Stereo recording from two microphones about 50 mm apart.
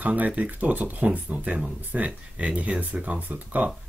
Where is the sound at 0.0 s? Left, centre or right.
Right.